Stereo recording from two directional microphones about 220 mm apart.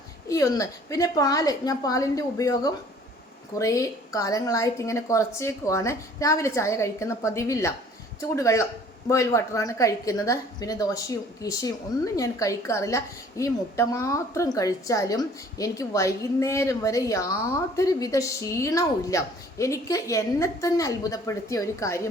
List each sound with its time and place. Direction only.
0.3 s a woman's voice: 15° left (ahead or behind)